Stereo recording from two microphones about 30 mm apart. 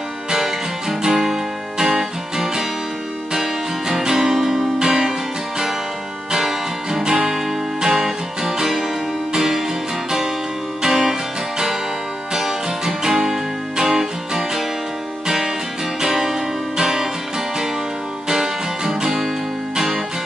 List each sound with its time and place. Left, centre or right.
0.3 s music: centre
1.1 s music: centre
6.3 s music: centre
10.8 s music: centre
12.4 s music: centre
18.3 s music: centre